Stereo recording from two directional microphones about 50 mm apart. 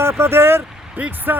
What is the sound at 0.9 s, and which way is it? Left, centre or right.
Speech, right.